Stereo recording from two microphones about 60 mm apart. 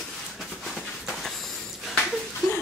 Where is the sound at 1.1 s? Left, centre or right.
Centre.